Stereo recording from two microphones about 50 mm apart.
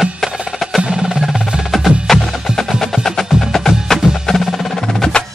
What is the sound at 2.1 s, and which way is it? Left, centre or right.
Music, centre.